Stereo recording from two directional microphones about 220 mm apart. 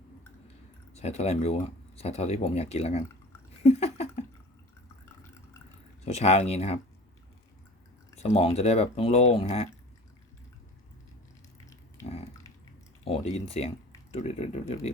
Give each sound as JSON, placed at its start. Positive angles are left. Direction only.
{"t": 0.9, "sound": "speech", "side_deg": 30}
{"t": 3.6, "sound": "a sound", "side_deg": 30}
{"t": 6.1, "sound": "speech", "side_deg": 30}
{"t": 8.1, "sound": "speech", "side_deg": 30}
{"t": 13.5, "sound": "speech", "side_deg": 25}